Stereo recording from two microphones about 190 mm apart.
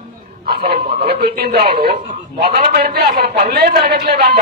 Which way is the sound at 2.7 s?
55° right (ahead or behind).